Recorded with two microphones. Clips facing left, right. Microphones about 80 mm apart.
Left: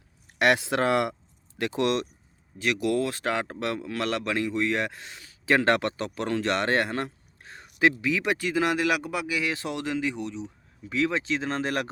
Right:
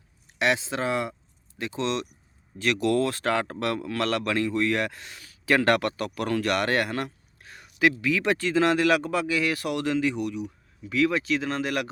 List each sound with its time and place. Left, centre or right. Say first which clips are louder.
0.3 s speech: left 3 dB; left
2.6 s speech: right 2 dB; centre; by 11.9 s left